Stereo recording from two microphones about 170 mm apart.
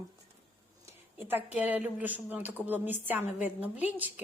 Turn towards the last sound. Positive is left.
turn(degrees=-10)  # may be behind; listen again after turning